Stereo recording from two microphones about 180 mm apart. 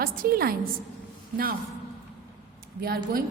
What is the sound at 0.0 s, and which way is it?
Speech, 55° right (ahead or behind).